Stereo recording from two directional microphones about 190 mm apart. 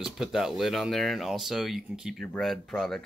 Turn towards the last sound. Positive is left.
turn(degrees=0)  # may be behind; listen again after turning